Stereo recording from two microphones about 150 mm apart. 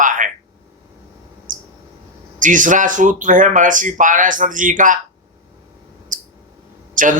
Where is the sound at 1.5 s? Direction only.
60° right (ahead or behind).